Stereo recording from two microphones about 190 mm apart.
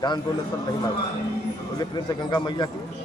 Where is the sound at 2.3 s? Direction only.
25° left (ahead or behind).